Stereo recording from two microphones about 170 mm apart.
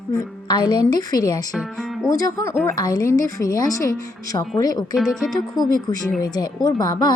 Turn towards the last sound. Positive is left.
turn(degrees=25)  # may be behind; listen again after turning